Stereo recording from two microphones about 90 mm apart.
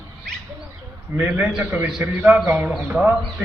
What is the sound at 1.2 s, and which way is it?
Speech, 20° right (ahead or behind).